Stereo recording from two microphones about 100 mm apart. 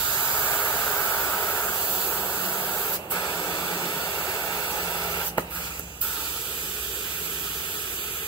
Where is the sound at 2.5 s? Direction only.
20° left (ahead or behind).